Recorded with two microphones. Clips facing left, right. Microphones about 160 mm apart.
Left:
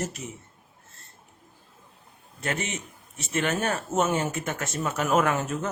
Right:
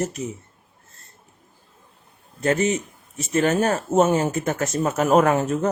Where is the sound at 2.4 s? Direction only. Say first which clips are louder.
Right 10 dB; 40° right (ahead or behind).